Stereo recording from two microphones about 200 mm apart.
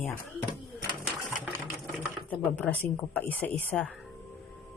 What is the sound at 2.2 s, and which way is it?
Speech, 5° left (ahead or behind).